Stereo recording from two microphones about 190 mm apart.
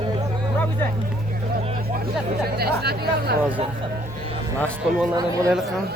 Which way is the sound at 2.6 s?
55° right (ahead or behind).